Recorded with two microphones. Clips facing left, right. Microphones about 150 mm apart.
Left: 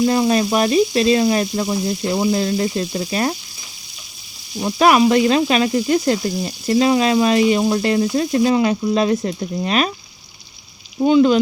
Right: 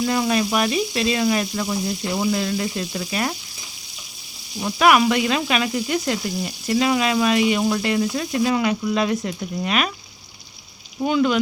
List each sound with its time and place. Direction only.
0.0 s frying: 30° left (ahead or behind)
4.6 s frying: 30° left (ahead or behind)
11.0 s speech: 30° left (ahead or behind)